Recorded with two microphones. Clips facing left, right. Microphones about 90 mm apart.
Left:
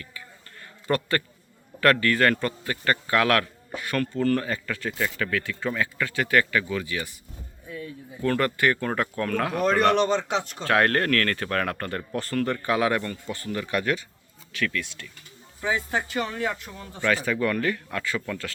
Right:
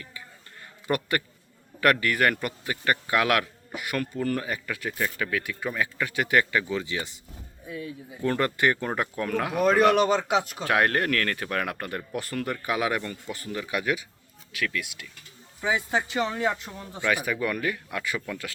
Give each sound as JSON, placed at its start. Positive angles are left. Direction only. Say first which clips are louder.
{"t": 0.9, "sound": "speech", "louder": "left 2 dB", "side_deg": -15}